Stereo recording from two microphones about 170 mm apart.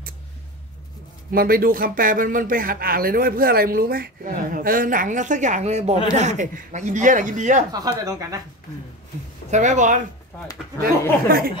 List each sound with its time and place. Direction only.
1.3 s speech: 60° right (ahead or behind)
7.7 s speech: 20° right (ahead or behind)
9.5 s speech: 45° right (ahead or behind)
10.3 s speech: 10° left (ahead or behind)
10.8 s speech: 60° right (ahead or behind)